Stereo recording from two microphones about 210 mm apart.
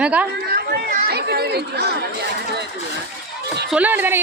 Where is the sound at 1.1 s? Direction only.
50° right (ahead or behind).